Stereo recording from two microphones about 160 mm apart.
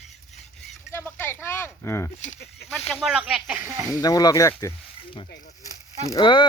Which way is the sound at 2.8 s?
5° left (ahead or behind).